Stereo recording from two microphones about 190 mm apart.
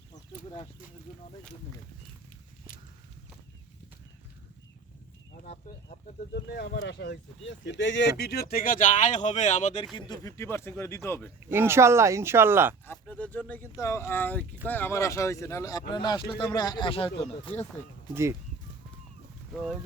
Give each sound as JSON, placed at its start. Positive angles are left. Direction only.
{"t": 0.1, "sound": "a sound", "side_deg": 25}
{"t": 5.4, "sound": "a sound", "side_deg": 40}
{"t": 6.3, "sound": "speech", "side_deg": 60}
{"t": 8.2, "sound": "speech", "side_deg": 55}
{"t": 9.9, "sound": "speech", "side_deg": 20}
{"t": 11.4, "sound": "speech", "side_deg": -10}
{"t": 12.8, "sound": "speech", "side_deg": 10}
{"t": 18.1, "sound": "speech", "side_deg": -15}
{"t": 19.5, "sound": "speech", "side_deg": 0}